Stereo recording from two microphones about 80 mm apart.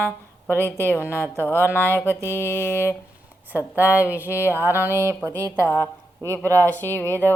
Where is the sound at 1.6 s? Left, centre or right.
Left.